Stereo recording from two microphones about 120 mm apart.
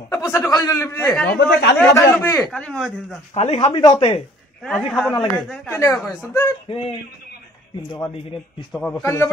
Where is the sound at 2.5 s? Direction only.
5° left (ahead or behind).